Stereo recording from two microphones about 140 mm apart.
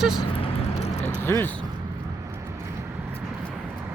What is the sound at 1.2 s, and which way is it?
Speech, 15° left (ahead or behind).